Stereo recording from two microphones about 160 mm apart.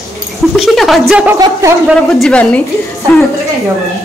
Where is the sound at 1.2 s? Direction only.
20° right (ahead or behind).